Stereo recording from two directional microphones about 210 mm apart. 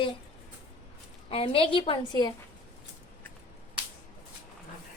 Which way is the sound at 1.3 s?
25° left (ahead or behind).